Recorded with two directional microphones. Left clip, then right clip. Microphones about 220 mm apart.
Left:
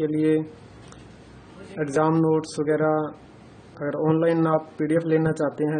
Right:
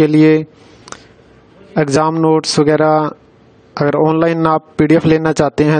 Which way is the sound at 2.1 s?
45° right (ahead or behind).